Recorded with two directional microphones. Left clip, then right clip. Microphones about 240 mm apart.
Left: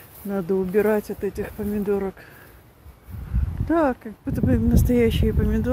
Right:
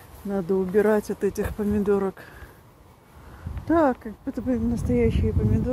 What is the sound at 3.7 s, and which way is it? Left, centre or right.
Speech, centre.